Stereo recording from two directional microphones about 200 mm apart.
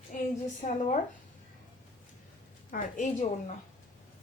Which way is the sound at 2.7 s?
40° left (ahead or behind).